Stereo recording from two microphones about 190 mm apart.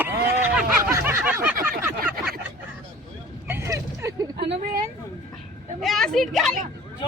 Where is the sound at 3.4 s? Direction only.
15° right (ahead or behind).